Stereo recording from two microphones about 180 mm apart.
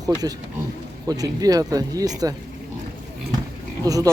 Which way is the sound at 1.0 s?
20° right (ahead or behind).